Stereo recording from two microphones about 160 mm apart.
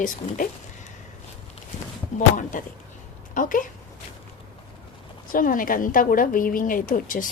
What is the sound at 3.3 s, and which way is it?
Speech, 55° left (ahead or behind).